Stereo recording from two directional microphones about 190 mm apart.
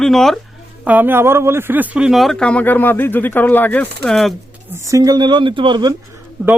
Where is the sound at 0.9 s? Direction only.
10° right (ahead or behind).